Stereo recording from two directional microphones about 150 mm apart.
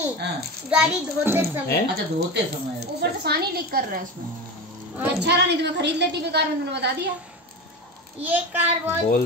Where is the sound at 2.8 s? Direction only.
90° right.